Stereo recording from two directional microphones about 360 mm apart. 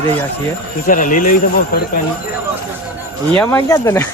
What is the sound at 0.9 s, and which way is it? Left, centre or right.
Speech, left.